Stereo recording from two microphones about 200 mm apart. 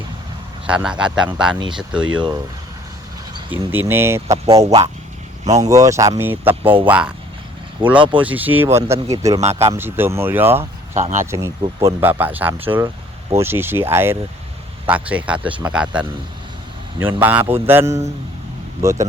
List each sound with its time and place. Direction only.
0.7 s speech: 5° right (ahead or behind)
3.5 s speech: 10° right (ahead or behind)
7.8 s speech: 25° right (ahead or behind)
8.2 s speech: 10° right (ahead or behind)
10.6 s speech: 35° right (ahead or behind)
11.2 s speech: 15° right (ahead or behind)
17.0 s speech: 10° right (ahead or behind)